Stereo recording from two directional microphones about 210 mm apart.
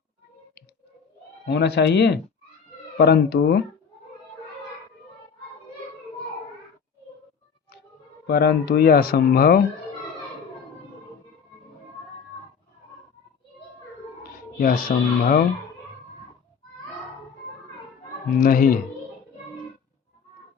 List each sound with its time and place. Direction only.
1.5 s speech: 55° left (ahead or behind)
8.3 s speech: 50° left (ahead or behind)
14.6 s speech: 40° left (ahead or behind)
18.3 s speech: 40° left (ahead or behind)